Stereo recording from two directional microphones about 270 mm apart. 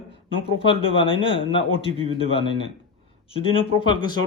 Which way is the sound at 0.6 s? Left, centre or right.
Centre.